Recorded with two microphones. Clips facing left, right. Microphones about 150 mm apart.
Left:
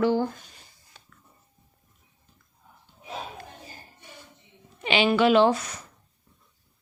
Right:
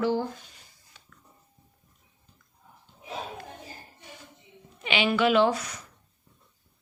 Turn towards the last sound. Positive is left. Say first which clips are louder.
# left 3 dB
turn(degrees=30)  # may be behind; listen again after turning